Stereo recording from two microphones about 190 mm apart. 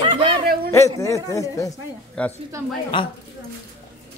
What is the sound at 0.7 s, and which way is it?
A man's voice, 15° left (ahead or behind).